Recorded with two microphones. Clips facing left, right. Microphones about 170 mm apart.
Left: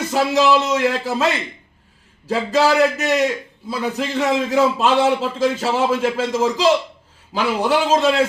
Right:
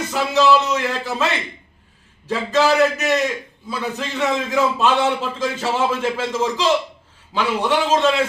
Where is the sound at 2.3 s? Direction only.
35° left (ahead or behind).